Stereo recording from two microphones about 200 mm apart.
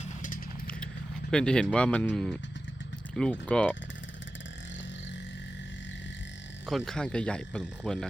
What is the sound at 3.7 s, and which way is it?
Vehicle, 65° left (ahead or behind).